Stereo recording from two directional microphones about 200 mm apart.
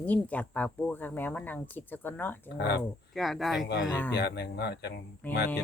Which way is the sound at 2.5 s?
55° left (ahead or behind).